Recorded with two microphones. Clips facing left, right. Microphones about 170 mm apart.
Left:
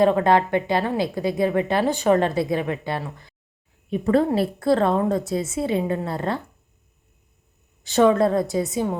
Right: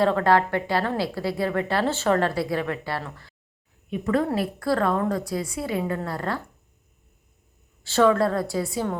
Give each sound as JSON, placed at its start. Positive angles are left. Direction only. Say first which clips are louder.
{"t": 0.0, "sound": "a woman's voice", "louder": "left 3 dB", "side_deg": 20}
{"t": 3.8, "sound": "a woman's voice", "louder": "left 4 dB", "side_deg": 30}
{"t": 7.9, "sound": "a woman's voice", "louder": "left 2 dB", "side_deg": 20}